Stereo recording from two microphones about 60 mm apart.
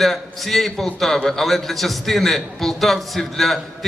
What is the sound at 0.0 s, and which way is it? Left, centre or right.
A man's voice, centre.